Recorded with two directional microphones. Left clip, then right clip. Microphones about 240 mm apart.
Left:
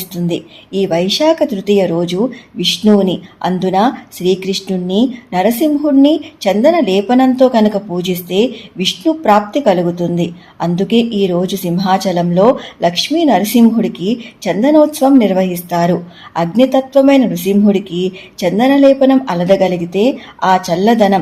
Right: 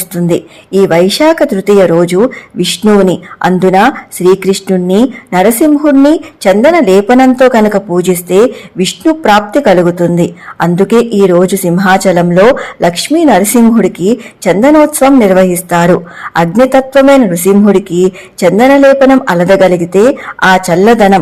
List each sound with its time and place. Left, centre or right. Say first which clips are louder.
0.1 s speech: right 9 dB; right